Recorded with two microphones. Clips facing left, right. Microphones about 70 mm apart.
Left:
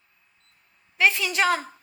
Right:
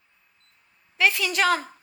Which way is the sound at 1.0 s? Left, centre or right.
Left.